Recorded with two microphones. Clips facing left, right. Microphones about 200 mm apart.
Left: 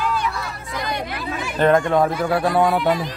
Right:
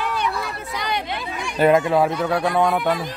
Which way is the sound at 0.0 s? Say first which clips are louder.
Left 1 dB; 65° right (ahead or behind).